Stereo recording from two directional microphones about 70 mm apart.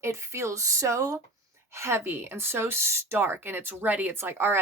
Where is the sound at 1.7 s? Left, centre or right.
Right.